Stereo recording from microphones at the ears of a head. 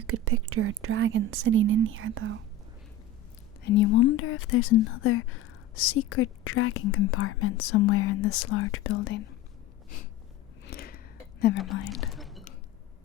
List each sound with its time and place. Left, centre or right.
0.1 s speech: right
3.6 s speech: left
10.7 s whispering: left
12.1 s drip: centre